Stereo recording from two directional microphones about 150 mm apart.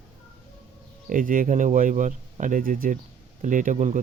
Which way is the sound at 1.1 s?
65° right (ahead or behind).